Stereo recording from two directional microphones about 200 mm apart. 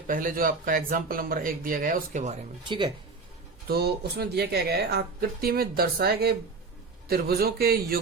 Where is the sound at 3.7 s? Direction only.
50° right (ahead or behind).